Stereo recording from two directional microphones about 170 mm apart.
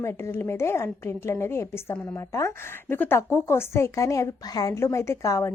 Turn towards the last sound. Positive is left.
turn(degrees=15)  # may be behind; listen again after turning